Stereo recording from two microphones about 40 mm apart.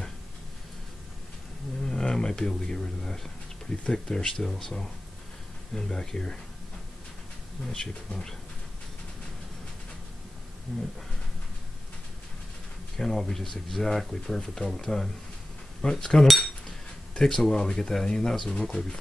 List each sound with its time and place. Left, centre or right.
1.9 s speech: centre
7.7 s speech: centre
10.7 s speech: centre
12.9 s speech: centre